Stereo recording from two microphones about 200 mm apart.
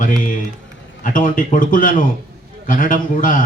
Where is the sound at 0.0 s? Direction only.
40° left (ahead or behind).